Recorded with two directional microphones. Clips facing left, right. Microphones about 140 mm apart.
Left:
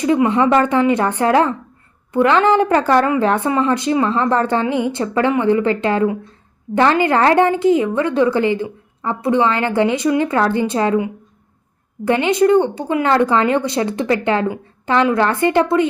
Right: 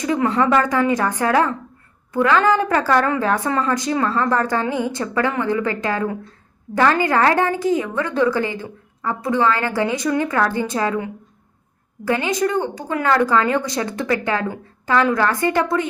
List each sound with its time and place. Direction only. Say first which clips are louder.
0.2 s a woman's voice: left 3 dB; 15° left (ahead or behind)
3.4 s a woman's voice: left 4 dB; 10° left (ahead or behind)
12.0 s a woman's voice: left 6 dB; 25° left (ahead or behind)